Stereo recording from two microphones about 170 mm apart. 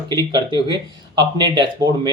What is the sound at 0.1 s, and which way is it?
Speech, 25° right (ahead or behind).